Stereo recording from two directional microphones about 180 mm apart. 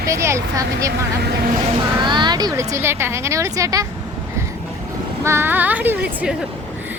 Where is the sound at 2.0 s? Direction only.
25° right (ahead or behind).